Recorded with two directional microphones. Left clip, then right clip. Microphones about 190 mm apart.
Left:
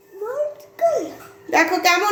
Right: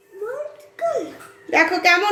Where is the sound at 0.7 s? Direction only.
20° right (ahead or behind).